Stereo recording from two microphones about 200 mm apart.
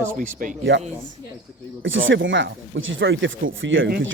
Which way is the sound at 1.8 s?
75° right (ahead or behind).